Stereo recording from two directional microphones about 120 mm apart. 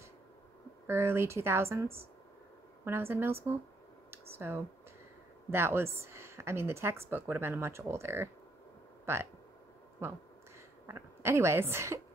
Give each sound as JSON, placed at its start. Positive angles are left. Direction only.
{"t": 0.8, "sound": "speech", "side_deg": -20}
{"t": 4.1, "sound": "a sound", "side_deg": -20}
{"t": 5.5, "sound": "speech", "side_deg": -20}
{"t": 10.9, "sound": "speech", "side_deg": -25}